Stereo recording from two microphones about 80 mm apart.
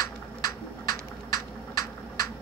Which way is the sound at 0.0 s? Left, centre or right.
Left.